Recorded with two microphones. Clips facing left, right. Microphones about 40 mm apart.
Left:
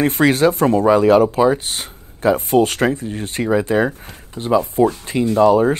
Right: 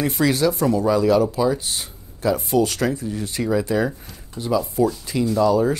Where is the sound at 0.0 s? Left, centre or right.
Left.